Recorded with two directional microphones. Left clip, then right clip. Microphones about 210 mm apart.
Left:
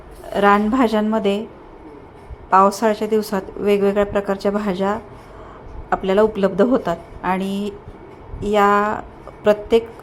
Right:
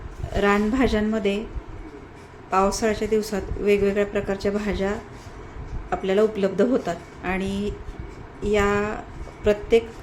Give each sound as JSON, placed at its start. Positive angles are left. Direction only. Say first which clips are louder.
{"t": 0.3, "sound": "a woman's voice", "louder": "left 6 dB", "side_deg": 15}
{"t": 2.5, "sound": "a woman's voice", "louder": "left 7 dB", "side_deg": 15}